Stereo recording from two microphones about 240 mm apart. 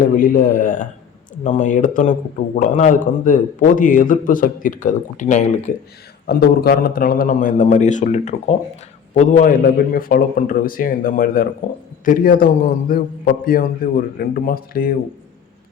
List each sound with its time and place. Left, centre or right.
0.0 s a man's voice: left
6.2 s a man's voice: left